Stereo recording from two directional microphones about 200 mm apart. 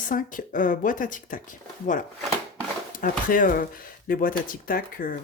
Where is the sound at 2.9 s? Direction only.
45° left (ahead or behind).